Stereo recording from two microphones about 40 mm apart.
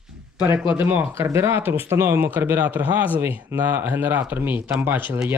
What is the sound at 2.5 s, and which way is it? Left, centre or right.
Speech, right.